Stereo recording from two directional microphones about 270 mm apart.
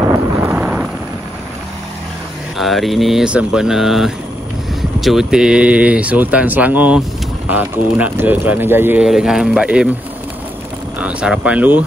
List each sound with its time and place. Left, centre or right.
0.0 s a sound: centre
2.5 s speech: centre
11.0 s speech: centre